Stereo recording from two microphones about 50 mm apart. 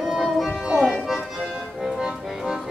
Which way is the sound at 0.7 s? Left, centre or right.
Centre.